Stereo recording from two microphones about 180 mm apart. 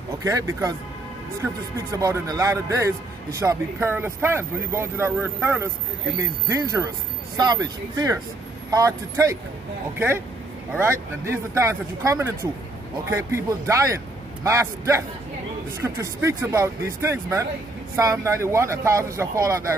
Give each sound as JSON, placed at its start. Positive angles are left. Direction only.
{"t": 0.2, "sound": "speech", "side_deg": -20}